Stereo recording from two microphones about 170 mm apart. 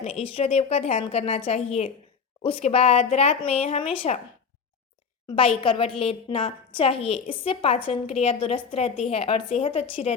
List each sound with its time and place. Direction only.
0.0 s a woman's voice: 35° left (ahead or behind)
5.3 s a woman's voice: 35° left (ahead or behind)